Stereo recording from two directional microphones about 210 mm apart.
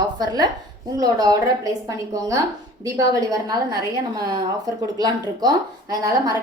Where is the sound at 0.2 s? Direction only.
20° right (ahead or behind).